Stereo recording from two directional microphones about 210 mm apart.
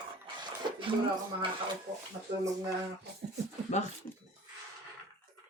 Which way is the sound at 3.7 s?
35° left (ahead or behind).